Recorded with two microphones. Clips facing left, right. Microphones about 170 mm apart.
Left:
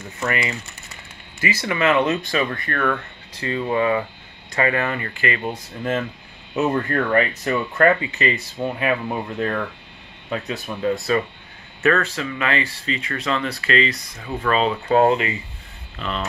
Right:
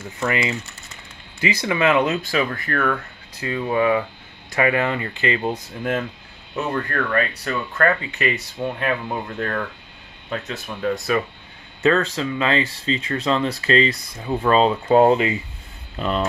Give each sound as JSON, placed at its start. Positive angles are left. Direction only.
{"t": 0.3, "sound": "speech", "side_deg": -20}
{"t": 6.5, "sound": "speech", "side_deg": 20}
{"t": 8.0, "sound": "speech", "side_deg": 5}
{"t": 11.8, "sound": "speech", "side_deg": -25}
{"t": 14.9, "sound": "speech", "side_deg": -5}
{"t": 16.0, "sound": "speech", "side_deg": -40}